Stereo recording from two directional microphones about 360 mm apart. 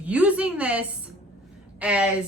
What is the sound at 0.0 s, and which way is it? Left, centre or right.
A woman's voice, centre.